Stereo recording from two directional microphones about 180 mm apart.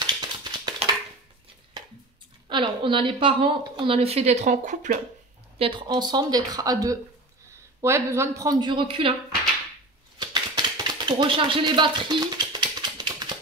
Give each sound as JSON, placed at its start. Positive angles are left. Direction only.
{"t": 0.0, "sound": "tap", "side_deg": -25}
{"t": 2.5, "sound": "a woman's voice", "side_deg": -25}
{"t": 5.6, "sound": "a woman's voice", "side_deg": -25}
{"t": 10.1, "sound": "typewriter", "side_deg": -25}